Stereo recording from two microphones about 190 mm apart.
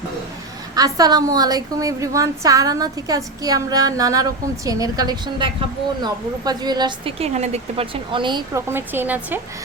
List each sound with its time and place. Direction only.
0.8 s a woman's voice: 20° right (ahead or behind)
8.7 s speech: 10° right (ahead or behind)